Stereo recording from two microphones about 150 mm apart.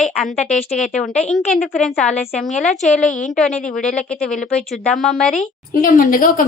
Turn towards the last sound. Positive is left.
turn(degrees=65)  # may be behind; listen again after turning